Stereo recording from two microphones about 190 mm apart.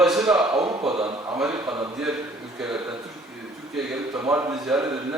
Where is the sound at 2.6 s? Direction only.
Centre (ahead or behind).